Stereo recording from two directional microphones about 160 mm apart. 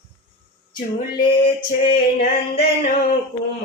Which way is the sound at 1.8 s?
60° left (ahead or behind).